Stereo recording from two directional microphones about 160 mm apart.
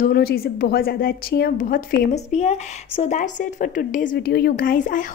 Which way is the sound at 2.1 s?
45° left (ahead or behind).